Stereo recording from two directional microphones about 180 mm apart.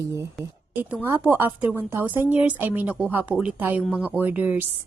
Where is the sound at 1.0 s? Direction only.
10° right (ahead or behind).